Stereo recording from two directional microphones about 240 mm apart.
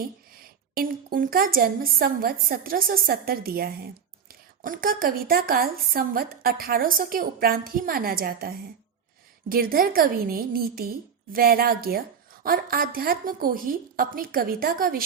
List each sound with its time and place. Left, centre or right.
0.7 s a woman's voice: right